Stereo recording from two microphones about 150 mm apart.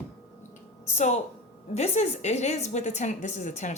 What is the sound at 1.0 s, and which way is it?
Speech, 50° left (ahead or behind).